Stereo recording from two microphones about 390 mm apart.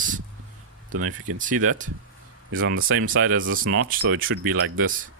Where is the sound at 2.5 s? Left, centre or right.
Right.